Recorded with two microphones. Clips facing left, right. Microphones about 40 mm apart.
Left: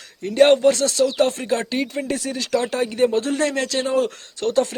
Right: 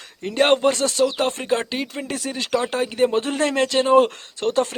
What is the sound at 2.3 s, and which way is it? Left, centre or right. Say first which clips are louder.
Speech: right 1 dB; right.